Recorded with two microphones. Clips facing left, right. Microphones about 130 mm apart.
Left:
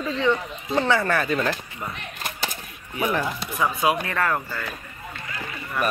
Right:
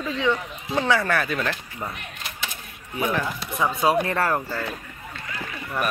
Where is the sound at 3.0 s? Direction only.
5° left (ahead or behind).